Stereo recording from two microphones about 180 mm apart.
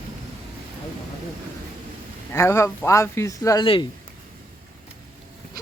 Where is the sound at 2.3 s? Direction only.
15° left (ahead or behind).